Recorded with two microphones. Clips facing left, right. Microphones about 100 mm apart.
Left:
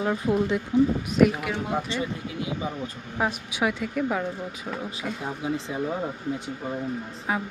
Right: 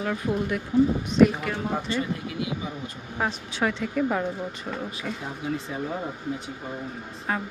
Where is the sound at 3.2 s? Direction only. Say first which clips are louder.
Left 1 dB; 10° left (ahead or behind).